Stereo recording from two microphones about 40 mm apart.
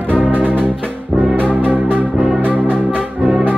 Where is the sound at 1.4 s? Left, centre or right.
Right.